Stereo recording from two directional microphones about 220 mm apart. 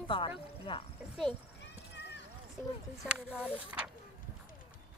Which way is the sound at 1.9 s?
50° left (ahead or behind).